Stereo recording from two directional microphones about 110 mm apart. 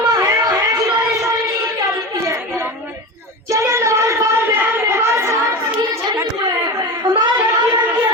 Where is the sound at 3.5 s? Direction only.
30° right (ahead or behind).